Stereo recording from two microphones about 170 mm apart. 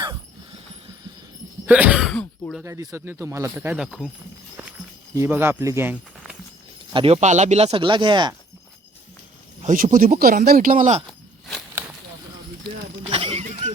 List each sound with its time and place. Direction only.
1.6 s a sound: 10° right (ahead or behind)
2.6 s speech: 15° right (ahead or behind)
5.1 s speech: 15° right (ahead or behind)
6.9 s speech: 35° right (ahead or behind)
9.6 s speech: 55° right (ahead or behind)
11.8 s bird flight: 10° right (ahead or behind)
12.6 s a sound: 30° right (ahead or behind)